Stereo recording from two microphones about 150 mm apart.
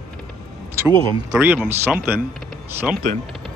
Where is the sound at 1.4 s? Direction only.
15° right (ahead or behind).